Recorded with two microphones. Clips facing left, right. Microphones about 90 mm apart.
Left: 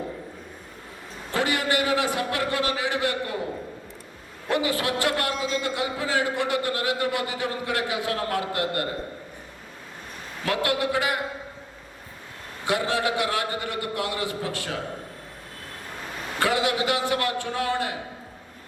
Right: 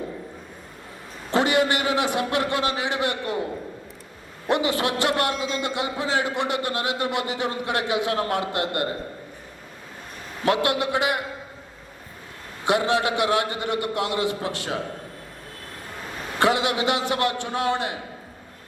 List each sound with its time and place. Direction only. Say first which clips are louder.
1.3 s a man's voice: right 4 dB; 20° right (ahead or behind)
4.4 s a man's voice: right 2 dB; 20° right (ahead or behind)
10.4 s a man's voice: right 3 dB; 20° right (ahead or behind)
12.6 s a man's voice: right 3 dB; 20° right (ahead or behind)
16.4 s a man's voice: right 2 dB; 20° right (ahead or behind)